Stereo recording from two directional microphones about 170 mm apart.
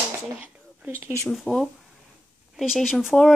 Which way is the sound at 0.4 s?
10° right (ahead or behind).